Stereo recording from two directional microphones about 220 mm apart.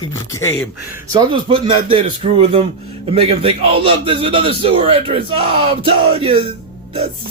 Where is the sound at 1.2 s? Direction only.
25° right (ahead or behind).